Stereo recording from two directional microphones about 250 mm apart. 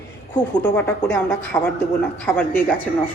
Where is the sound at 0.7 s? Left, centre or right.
Centre.